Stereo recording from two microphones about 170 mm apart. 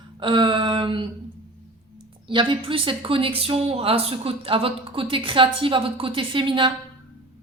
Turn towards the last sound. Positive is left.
turn(degrees=-30)  # may be behind; listen again after turning